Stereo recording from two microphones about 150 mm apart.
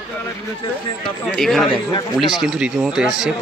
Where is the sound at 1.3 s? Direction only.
Centre (ahead or behind).